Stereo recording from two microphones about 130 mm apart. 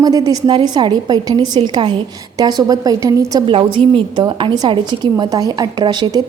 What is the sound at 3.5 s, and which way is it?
A woman's voice, 45° right (ahead or behind).